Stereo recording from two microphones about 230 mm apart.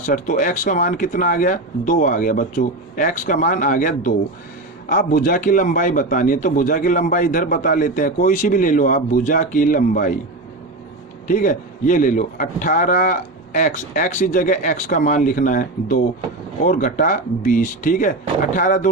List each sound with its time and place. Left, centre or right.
0.0 s a man's voice: left
11.3 s a man's voice: left